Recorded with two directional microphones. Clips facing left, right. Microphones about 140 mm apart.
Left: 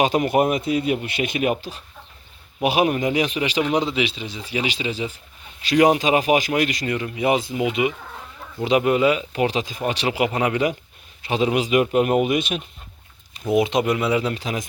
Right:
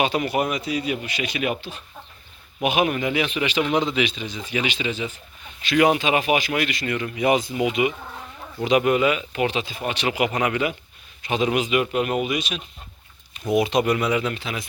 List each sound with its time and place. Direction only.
0.0 s speech: 45° left (ahead or behind)
13.5 s speech: 25° left (ahead or behind); by 14.7 s 40° left (ahead or behind)